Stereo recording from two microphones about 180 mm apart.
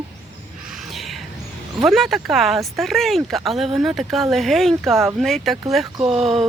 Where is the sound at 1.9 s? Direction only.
Centre (ahead or behind).